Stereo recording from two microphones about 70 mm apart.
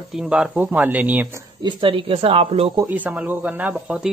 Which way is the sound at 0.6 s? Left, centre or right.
Right.